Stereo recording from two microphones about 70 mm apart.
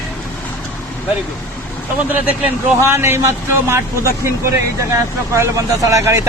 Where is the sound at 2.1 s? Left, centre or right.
Right.